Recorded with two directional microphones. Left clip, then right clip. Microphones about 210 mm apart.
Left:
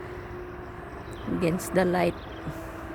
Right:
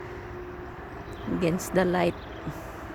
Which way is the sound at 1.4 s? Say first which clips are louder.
Even; 5° right (ahead or behind).